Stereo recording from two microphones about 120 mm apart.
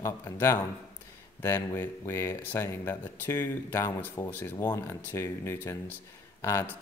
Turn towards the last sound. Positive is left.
turn(degrees=20)  # may be behind; listen again after turning